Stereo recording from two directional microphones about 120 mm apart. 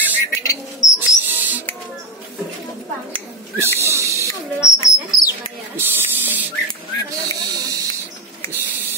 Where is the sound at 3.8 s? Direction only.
25° right (ahead or behind).